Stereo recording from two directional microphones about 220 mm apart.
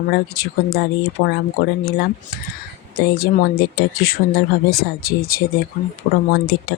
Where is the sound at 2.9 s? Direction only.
45° left (ahead or behind).